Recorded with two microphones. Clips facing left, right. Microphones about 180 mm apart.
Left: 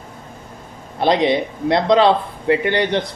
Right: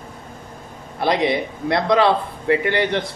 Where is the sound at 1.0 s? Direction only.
25° left (ahead or behind).